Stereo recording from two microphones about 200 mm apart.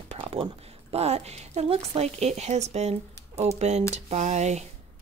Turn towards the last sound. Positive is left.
turn(degrees=-35)  # may be behind; listen again after turning